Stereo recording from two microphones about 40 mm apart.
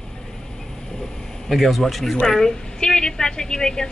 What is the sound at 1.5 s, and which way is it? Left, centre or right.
A man's voice, centre.